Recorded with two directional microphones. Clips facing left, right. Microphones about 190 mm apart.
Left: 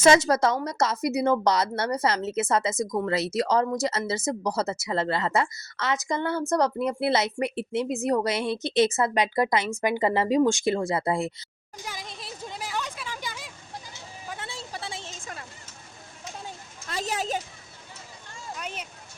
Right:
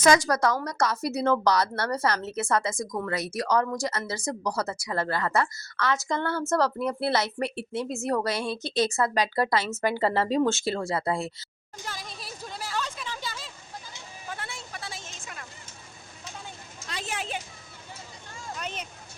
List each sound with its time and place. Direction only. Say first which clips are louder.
0.0 s a woman's voice: left 2 dB; 25° left (ahead or behind)
11.9 s a sound: left 1 dB; 20° left (ahead or behind)
14.3 s vehicle: even; 20° left (ahead or behind)
14.5 s a sound: left 3 dB; 30° left (ahead or behind)
15.1 s vehicle: left 3 dB; 40° left (ahead or behind)
16.9 s children playing: left 5 dB; 40° left (ahead or behind)
18.5 s vehicle: right 1 dB; 5° left (ahead or behind)